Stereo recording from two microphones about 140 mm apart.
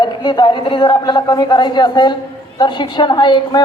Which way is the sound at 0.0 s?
30° left (ahead or behind).